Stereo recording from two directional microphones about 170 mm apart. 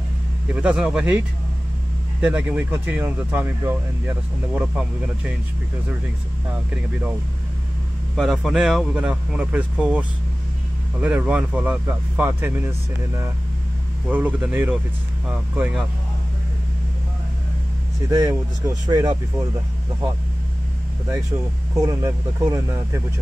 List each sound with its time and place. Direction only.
0.6 s speech: 10° right (ahead or behind)
2.2 s speech: 10° right (ahead or behind)
8.2 s speech: centre (ahead or behind)
14.0 s speech: 5° right (ahead or behind)
18.1 s speech: 20° right (ahead or behind)
21.7 s speech: 20° right (ahead or behind)